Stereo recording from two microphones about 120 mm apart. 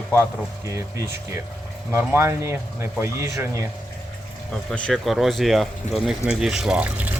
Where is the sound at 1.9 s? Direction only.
20° right (ahead or behind).